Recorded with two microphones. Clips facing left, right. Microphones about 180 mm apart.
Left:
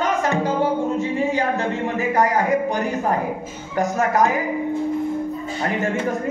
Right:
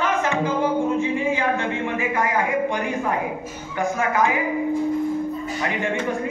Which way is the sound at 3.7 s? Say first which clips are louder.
Left 3 dB; 40° left (ahead or behind).